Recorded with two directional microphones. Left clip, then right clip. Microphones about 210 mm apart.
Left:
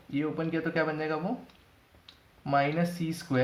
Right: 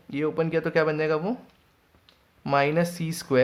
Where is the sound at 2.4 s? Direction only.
45° right (ahead or behind).